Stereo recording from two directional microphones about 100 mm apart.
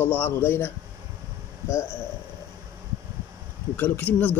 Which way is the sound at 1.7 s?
25° left (ahead or behind).